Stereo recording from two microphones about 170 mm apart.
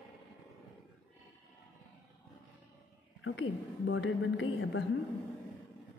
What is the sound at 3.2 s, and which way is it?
A woman's voice, 90° left.